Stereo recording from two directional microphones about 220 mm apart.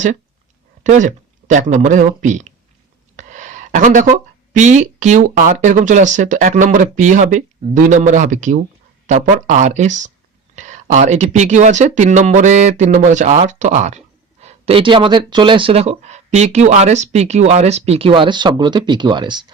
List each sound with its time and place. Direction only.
0.9 s speech: 35° right (ahead or behind)
3.2 s a sound: 35° right (ahead or behind)
4.5 s speech: 35° right (ahead or behind)